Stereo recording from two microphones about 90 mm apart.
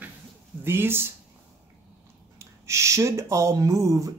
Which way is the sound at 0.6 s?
25° right (ahead or behind).